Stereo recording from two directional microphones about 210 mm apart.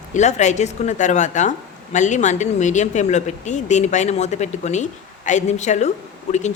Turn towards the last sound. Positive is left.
turn(degrees=35)  # may be behind; listen again after turning